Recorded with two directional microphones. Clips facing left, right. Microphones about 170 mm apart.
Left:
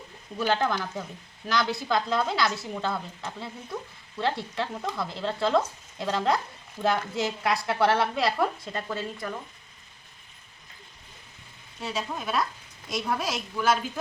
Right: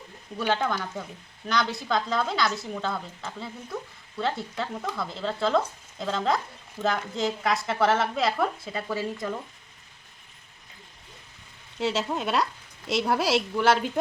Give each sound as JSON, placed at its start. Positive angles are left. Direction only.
{"t": 0.3, "sound": "a woman's voice", "side_deg": 0}
{"t": 11.8, "sound": "a woman's voice", "side_deg": -90}